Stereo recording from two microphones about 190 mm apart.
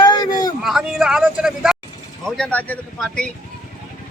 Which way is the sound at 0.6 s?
Centre (ahead or behind).